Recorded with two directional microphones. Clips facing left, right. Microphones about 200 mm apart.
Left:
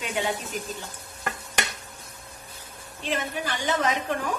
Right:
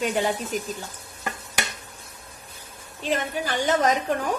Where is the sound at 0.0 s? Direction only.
40° right (ahead or behind).